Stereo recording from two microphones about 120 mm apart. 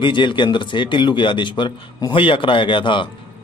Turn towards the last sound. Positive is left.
turn(degrees=45)  # may be behind; listen again after turning